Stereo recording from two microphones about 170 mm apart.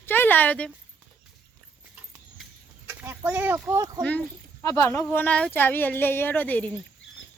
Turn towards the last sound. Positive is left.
turn(degrees=10)  # may be behind; listen again after turning